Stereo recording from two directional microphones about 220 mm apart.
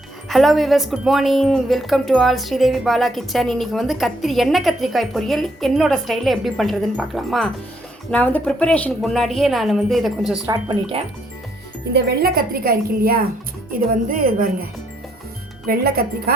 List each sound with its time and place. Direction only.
0.3 s a woman's voice: centre (ahead or behind)
10.4 s speech: 15° right (ahead or behind)
11.9 s a woman's voice: 45° right (ahead or behind)